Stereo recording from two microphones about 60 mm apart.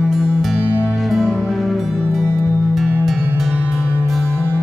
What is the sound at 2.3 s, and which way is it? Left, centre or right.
Music, left.